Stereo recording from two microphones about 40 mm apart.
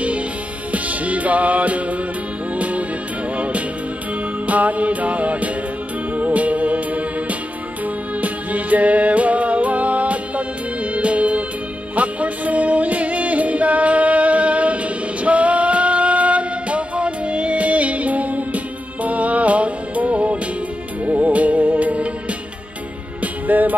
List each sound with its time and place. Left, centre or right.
0.7 s music: right
4.5 s music: right
23.2 s music: right